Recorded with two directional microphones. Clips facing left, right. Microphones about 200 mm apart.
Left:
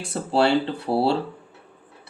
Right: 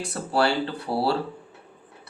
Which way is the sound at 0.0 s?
25° left (ahead or behind).